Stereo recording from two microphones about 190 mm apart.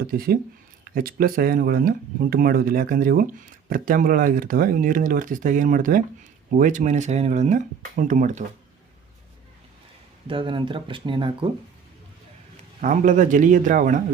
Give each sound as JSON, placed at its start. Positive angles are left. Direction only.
{"t": 0.1, "sound": "speech", "side_deg": -50}
{"t": 10.2, "sound": "speech", "side_deg": -25}
{"t": 12.8, "sound": "speech", "side_deg": -45}